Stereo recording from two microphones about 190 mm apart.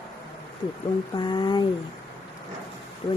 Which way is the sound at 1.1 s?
25° left (ahead or behind).